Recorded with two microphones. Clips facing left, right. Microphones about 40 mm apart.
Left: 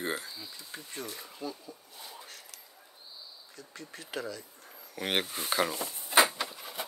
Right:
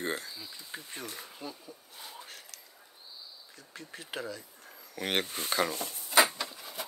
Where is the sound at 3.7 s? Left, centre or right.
Centre.